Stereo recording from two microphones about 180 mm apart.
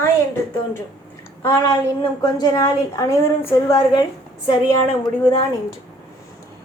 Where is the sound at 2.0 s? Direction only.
20° left (ahead or behind).